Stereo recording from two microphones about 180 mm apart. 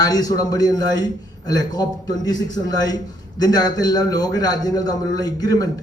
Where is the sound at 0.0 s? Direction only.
20° left (ahead or behind).